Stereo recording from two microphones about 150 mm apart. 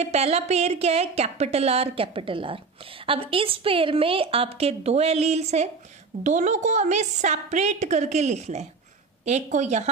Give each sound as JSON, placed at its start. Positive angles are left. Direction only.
{"t": 0.0, "sound": "a woman's voice", "side_deg": -45}